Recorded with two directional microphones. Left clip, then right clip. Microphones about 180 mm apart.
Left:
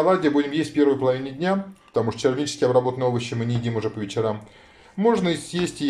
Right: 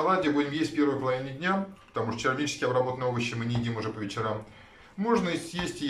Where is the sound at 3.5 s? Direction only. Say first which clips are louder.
Left 4 dB; centre (ahead or behind).